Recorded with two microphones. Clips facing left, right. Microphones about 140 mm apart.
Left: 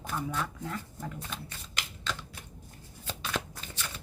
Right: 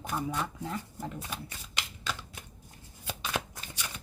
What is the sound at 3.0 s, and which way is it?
Shuffling cards, 10° right (ahead or behind).